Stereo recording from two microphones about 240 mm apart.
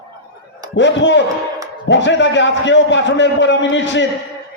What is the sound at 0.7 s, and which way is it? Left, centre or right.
A man's voice, left.